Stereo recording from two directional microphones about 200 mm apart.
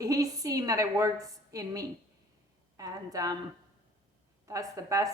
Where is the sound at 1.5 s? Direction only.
15° right (ahead or behind).